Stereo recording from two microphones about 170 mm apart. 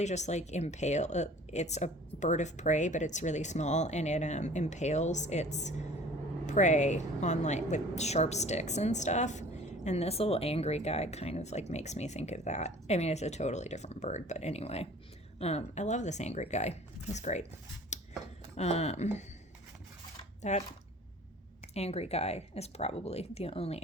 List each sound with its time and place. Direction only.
0.0 s a woman's voice: 40° left (ahead or behind)
17.9 s scissors: 45° left (ahead or behind)
18.5 s a woman's voice: 40° left (ahead or behind)
20.4 s speech: 40° left (ahead or behind)
21.8 s a woman's voice: 40° left (ahead or behind)